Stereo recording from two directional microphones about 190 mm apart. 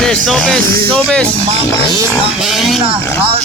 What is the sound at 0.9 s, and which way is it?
Speech, 5° left (ahead or behind).